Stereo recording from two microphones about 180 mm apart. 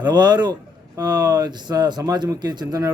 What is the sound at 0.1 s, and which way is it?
Speech, 25° right (ahead or behind).